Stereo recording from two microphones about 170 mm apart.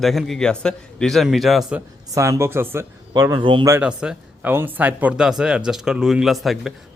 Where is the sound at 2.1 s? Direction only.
15° right (ahead or behind).